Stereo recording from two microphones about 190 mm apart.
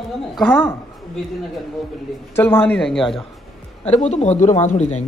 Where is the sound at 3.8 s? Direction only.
35° left (ahead or behind).